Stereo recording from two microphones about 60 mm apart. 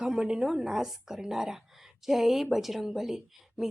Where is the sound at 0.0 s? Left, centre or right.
Centre.